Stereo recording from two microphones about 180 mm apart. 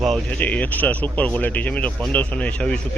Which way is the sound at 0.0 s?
5° left (ahead or behind).